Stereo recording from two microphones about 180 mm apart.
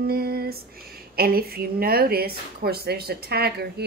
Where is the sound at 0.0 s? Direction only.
55° right (ahead or behind).